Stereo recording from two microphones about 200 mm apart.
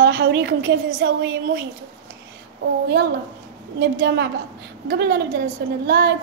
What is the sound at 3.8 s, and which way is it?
A woman's voice, 55° right (ahead or behind).